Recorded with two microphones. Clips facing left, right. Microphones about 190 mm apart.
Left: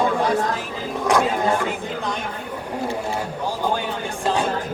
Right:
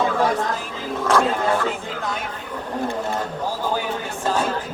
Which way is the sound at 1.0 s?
15° left (ahead or behind).